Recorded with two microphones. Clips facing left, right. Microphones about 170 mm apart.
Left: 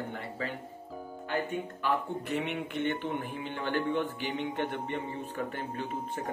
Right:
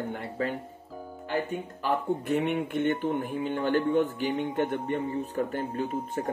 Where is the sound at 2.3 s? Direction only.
50° right (ahead or behind).